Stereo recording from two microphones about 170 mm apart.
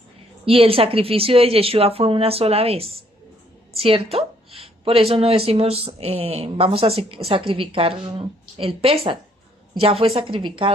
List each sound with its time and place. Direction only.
0.4 s speech: 35° right (ahead or behind)